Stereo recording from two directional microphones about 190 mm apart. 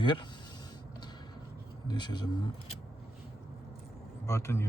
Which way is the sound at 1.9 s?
25° left (ahead or behind).